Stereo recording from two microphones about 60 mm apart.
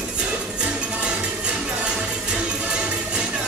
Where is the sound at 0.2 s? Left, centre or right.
Centre.